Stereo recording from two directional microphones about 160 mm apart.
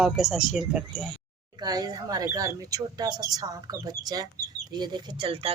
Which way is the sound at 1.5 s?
25° right (ahead or behind).